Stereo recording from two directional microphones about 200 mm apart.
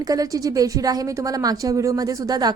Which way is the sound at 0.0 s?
20° right (ahead or behind).